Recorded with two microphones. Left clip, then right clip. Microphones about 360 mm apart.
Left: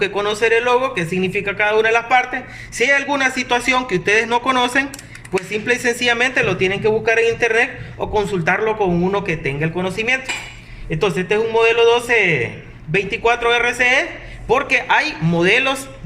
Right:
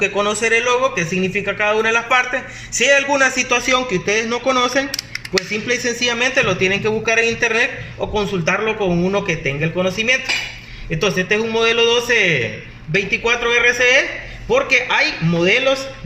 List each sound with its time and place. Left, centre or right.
0.0 s a man's voice: left